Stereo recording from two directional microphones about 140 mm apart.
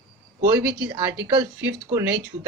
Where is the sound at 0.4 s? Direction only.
30° right (ahead or behind).